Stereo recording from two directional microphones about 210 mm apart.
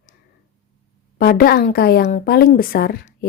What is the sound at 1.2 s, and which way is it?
A woman's voice, 45° left (ahead or behind).